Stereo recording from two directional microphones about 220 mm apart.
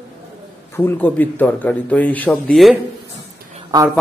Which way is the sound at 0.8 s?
10° left (ahead or behind).